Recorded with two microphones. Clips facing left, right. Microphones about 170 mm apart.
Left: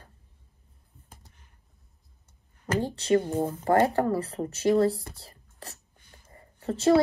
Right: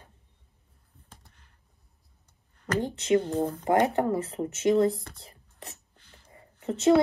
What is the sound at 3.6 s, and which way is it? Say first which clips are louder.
A woman's voice: left 2 dB; 15° right (ahead or behind).